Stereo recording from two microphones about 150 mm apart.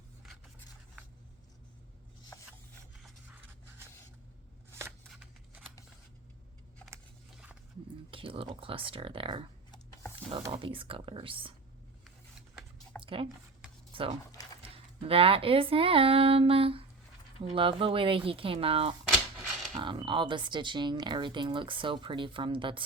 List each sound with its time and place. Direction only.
8.1 s speech: 35° right (ahead or behind)
13.0 s squish: 35° right (ahead or behind)
13.9 s speech: 40° right (ahead or behind)